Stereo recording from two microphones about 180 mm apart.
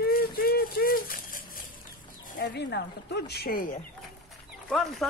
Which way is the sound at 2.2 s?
50° left (ahead or behind).